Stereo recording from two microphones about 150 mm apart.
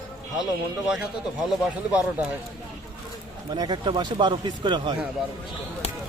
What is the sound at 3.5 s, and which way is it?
Speech, 30° right (ahead or behind).